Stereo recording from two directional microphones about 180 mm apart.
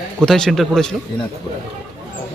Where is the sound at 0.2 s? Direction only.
5° left (ahead or behind).